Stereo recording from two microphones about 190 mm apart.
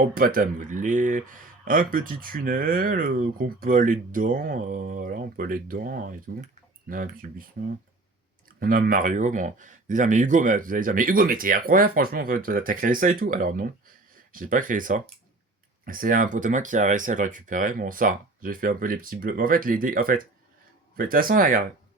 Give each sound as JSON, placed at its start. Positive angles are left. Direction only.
{"t": 0.1, "sound": "speech", "side_deg": -50}
{"t": 8.5, "sound": "speech", "side_deg": -50}